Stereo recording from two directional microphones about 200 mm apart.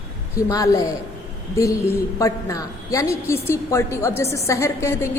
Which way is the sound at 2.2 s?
15° left (ahead or behind).